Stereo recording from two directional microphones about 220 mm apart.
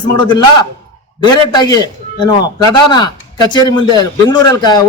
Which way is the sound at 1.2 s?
20° left (ahead or behind).